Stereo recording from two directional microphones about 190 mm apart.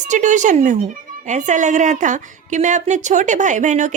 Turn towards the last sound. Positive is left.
turn(degrees=-40)  # may be behind; listen again after turning